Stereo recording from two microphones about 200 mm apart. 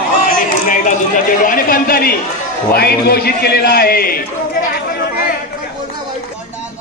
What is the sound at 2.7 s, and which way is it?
A man's voice, 50° left (ahead or behind).